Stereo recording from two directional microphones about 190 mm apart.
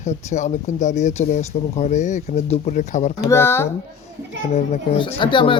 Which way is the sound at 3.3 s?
15° left (ahead or behind).